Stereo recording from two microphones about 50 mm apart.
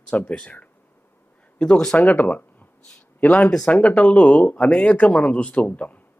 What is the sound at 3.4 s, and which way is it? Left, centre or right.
Speech, centre.